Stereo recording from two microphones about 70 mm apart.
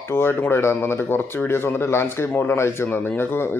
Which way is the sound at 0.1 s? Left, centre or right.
Left.